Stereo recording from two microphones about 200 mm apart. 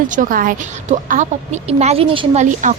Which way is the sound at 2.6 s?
40° right (ahead or behind).